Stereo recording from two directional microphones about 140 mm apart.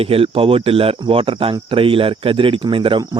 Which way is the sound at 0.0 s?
40° right (ahead or behind).